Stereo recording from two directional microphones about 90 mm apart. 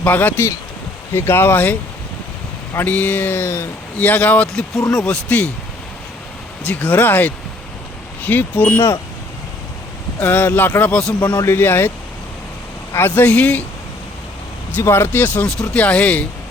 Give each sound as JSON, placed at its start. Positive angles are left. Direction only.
{"t": 0.0, "sound": "speech", "side_deg": 20}
{"t": 2.7, "sound": "speech", "side_deg": 20}
{"t": 4.0, "sound": "speech", "side_deg": 15}
{"t": 6.7, "sound": "speech", "side_deg": 15}
{"t": 10.2, "sound": "speech", "side_deg": 20}
{"t": 11.2, "sound": "a man's voice", "side_deg": 50}
{"t": 11.4, "sound": "speech", "side_deg": 25}
{"t": 12.9, "sound": "speech", "side_deg": 25}
{"t": 14.8, "sound": "speech", "side_deg": 30}